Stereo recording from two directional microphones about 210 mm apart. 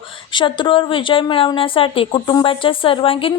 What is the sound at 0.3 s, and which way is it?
A woman's voice, 20° left (ahead or behind).